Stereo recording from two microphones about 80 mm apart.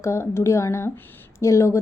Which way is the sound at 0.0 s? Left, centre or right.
Left.